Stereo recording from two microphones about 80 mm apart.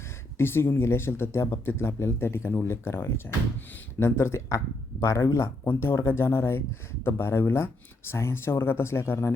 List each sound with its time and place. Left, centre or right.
0.3 s speech: left